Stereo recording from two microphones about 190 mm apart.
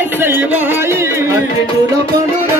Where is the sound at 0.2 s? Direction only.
10° right (ahead or behind).